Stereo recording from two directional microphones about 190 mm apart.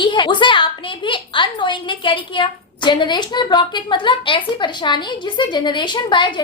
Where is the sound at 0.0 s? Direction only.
25° left (ahead or behind).